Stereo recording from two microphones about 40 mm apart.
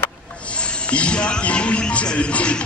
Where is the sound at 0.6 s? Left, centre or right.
Left.